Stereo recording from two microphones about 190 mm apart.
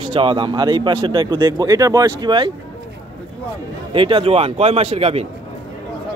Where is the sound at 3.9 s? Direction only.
25° right (ahead or behind).